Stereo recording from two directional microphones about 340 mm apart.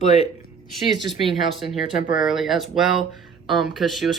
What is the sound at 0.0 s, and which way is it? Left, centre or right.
Speech, centre.